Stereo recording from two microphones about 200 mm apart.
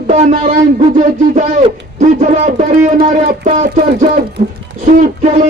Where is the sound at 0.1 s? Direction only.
35° right (ahead or behind).